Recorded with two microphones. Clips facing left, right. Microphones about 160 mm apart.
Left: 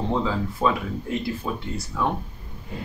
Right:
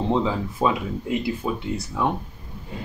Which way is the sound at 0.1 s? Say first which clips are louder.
Right 2 dB; 20° right (ahead or behind).